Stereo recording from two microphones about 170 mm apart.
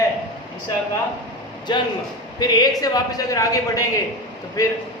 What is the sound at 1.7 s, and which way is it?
A man's voice, 25° left (ahead or behind).